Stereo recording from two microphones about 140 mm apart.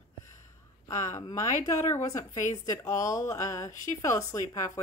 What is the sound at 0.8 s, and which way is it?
Speech, 25° left (ahead or behind).